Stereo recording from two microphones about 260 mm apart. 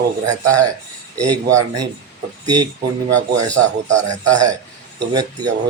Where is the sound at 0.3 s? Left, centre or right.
Centre.